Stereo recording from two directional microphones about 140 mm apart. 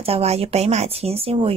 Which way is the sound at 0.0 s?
45° right (ahead or behind).